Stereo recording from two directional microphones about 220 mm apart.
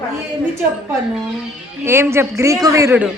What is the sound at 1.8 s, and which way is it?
A woman's voice, 10° right (ahead or behind).